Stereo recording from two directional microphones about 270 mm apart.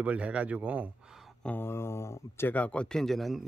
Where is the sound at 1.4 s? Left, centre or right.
Centre.